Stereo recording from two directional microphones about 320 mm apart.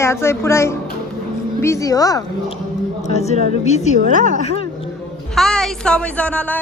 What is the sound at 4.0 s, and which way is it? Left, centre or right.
Speech, right.